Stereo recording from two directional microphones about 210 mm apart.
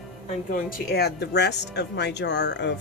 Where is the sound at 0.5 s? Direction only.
50° left (ahead or behind).